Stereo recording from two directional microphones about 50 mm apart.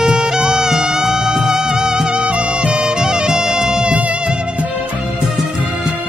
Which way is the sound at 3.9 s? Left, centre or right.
Right.